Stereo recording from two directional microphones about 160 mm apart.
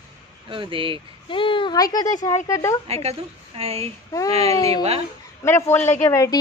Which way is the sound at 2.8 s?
40° right (ahead or behind).